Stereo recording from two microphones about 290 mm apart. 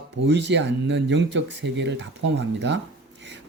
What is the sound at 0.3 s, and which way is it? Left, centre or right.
Speech, right.